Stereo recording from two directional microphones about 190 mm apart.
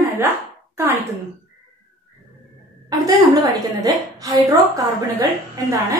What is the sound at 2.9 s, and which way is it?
A woman's voice, 20° right (ahead or behind).